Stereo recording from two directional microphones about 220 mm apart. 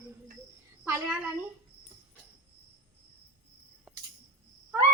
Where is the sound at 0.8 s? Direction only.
10° right (ahead or behind).